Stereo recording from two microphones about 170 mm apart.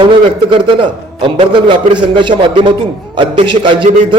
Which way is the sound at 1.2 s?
30° right (ahead or behind).